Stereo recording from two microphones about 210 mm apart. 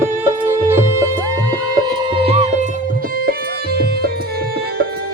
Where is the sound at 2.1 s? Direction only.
25° right (ahead or behind).